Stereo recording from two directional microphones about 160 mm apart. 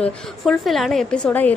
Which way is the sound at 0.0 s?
Centre (ahead or behind).